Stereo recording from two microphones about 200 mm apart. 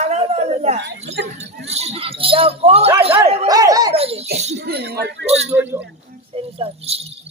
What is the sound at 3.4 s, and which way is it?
Speech, 20° right (ahead or behind).